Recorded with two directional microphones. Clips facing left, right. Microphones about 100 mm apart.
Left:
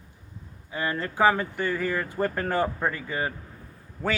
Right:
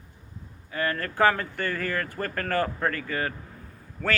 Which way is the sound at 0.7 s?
15° left (ahead or behind).